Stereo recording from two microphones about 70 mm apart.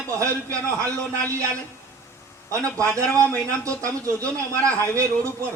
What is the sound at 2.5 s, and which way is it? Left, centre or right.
A man's voice, right.